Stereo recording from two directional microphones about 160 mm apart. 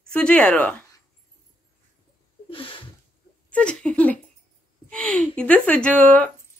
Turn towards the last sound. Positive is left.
turn(degrees=10)  # may be behind; listen again after turning